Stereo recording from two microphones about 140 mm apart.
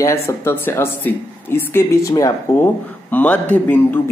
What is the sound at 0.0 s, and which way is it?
Speech, 20° left (ahead or behind).